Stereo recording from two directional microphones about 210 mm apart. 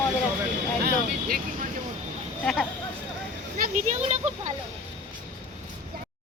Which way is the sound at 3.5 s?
40° right (ahead or behind).